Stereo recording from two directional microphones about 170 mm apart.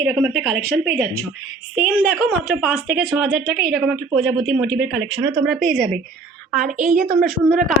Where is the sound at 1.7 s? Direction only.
10° right (ahead or behind).